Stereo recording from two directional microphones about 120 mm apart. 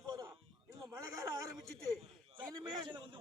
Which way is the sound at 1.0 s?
30° right (ahead or behind).